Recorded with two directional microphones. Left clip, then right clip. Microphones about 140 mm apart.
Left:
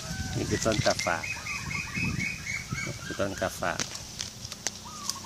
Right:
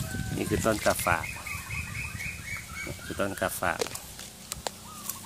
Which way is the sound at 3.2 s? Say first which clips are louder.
Right 1 dB; 25° right (ahead or behind).